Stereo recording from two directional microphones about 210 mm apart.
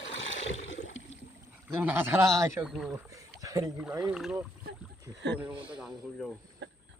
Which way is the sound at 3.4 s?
15° right (ahead or behind).